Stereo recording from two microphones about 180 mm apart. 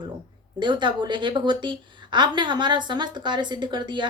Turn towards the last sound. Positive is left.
turn(degrees=-25)  # may be behind; listen again after turning